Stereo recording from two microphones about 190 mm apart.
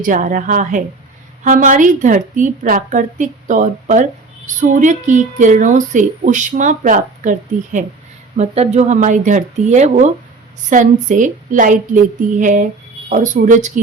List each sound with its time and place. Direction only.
0.0 s a woman's voice: 45° right (ahead or behind)